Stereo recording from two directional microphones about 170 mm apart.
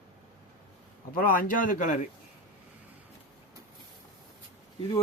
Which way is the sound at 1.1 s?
55° left (ahead or behind).